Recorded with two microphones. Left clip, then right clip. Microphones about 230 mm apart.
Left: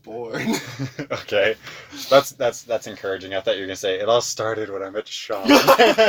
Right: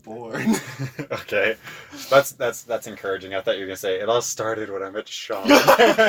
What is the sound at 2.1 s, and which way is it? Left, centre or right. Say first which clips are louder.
Speech: left 1 dB; left.